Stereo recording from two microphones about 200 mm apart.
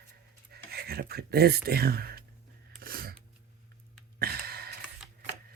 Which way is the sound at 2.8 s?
50° right (ahead or behind).